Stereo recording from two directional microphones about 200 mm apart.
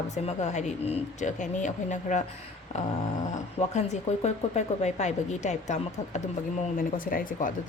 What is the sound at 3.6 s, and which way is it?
Speech, 30° left (ahead or behind).